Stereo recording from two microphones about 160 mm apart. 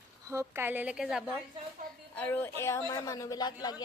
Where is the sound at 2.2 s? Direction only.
10° left (ahead or behind).